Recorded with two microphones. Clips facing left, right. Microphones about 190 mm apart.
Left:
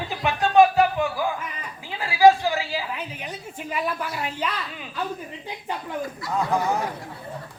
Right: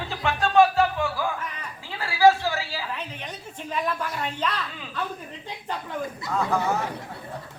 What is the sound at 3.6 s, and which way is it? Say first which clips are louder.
Speech: even; 10° left (ahead or behind).